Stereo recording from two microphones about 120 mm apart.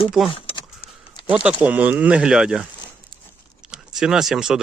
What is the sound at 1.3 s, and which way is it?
Speech, 10° right (ahead or behind).